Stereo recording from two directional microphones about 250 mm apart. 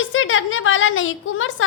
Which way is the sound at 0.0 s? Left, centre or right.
Left.